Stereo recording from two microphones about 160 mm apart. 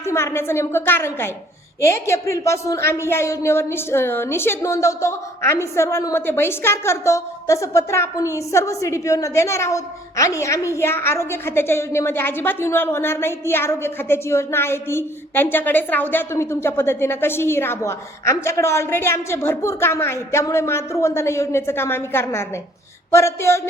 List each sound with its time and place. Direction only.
0.0 s speech: 15° left (ahead or behind)